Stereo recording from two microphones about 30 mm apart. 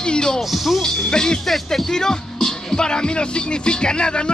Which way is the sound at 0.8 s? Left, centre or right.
Left.